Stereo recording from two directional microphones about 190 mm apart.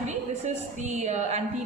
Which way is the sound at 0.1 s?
35° right (ahead or behind).